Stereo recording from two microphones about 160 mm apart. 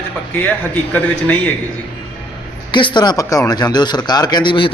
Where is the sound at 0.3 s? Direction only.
10° left (ahead or behind).